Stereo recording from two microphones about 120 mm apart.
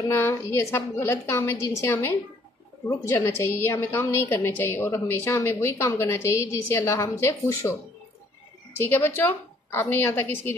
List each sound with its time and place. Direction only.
0.1 s a woman's voice: 20° left (ahead or behind)
8.8 s a woman's voice: 20° left (ahead or behind)